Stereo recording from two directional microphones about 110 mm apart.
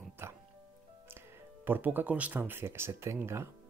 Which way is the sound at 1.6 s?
15° right (ahead or behind).